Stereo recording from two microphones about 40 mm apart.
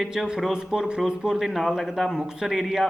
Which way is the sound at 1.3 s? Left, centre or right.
Centre.